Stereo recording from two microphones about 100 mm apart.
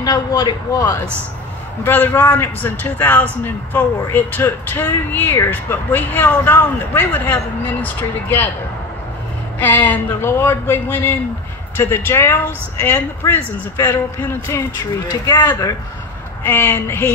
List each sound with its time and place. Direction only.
0.0 s a man's voice: 40° left (ahead or behind)
1.8 s speech: 20° left (ahead or behind)
9.6 s speech: 15° left (ahead or behind)